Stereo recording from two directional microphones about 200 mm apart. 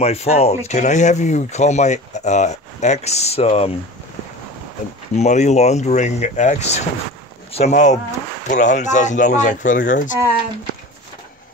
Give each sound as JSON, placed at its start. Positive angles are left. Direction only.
{"t": 0.0, "sound": "speech", "side_deg": 30}
{"t": 5.1, "sound": "speech", "side_deg": 35}